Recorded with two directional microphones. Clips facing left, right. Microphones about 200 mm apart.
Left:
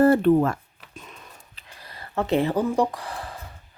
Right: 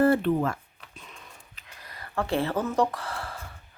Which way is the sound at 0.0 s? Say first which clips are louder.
Left 5 dB; 45° left (ahead or behind).